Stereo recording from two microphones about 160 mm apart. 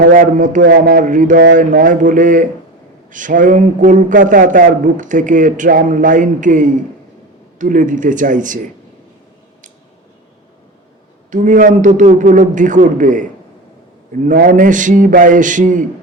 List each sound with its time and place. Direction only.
0.0 s a man's voice: 55° right (ahead or behind)
0.6 s a man's voice: 70° right (ahead or behind); by 8.5 s 55° right (ahead or behind)
11.3 s a man's voice: 50° right (ahead or behind)